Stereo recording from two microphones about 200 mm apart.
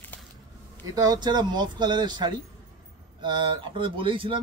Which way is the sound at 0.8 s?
20° right (ahead or behind).